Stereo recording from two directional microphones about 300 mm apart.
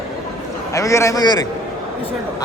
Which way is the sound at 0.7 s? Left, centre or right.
Centre.